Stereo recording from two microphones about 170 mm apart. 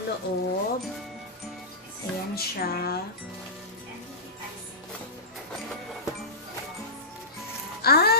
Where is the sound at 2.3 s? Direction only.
65° left (ahead or behind).